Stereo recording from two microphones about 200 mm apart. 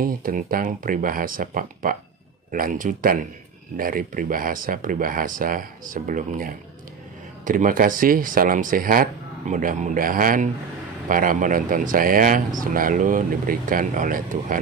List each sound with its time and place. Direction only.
0.0 s speech: 45° right (ahead or behind)